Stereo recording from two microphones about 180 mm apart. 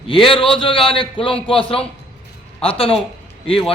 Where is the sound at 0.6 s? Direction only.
30° left (ahead or behind).